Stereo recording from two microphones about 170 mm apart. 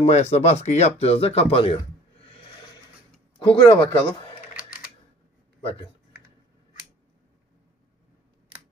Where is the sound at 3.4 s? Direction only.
30° left (ahead or behind).